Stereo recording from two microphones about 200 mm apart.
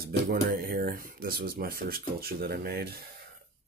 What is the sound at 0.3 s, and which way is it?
Speech, 50° right (ahead or behind).